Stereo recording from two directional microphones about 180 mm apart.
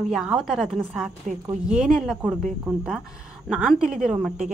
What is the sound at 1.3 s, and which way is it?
Speech, 45° right (ahead or behind).